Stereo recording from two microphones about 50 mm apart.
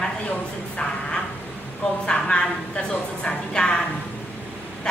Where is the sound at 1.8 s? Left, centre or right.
Centre.